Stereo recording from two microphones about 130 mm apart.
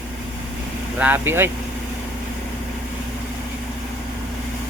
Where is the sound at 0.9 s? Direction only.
15° right (ahead or behind).